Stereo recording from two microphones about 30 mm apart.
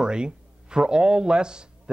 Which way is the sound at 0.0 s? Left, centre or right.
Right.